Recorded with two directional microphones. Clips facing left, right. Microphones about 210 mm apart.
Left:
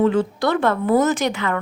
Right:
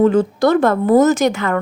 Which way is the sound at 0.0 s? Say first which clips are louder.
Right 5 dB; 40° right (ahead or behind).